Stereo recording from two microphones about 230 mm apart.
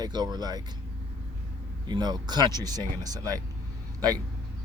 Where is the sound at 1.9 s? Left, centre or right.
Centre.